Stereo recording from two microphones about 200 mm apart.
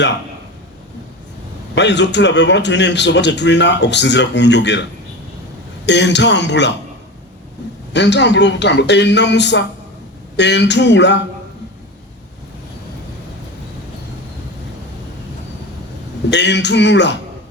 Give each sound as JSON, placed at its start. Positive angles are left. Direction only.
{"t": 1.7, "sound": "a man's voice", "side_deg": 60}
{"t": 7.9, "sound": "a man's voice", "side_deg": 60}
{"t": 16.3, "sound": "a man's voice", "side_deg": 60}